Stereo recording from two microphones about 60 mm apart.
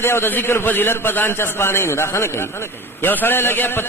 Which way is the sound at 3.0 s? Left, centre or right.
Left.